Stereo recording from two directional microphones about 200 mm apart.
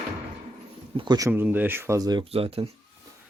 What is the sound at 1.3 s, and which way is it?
Speech, 10° right (ahead or behind).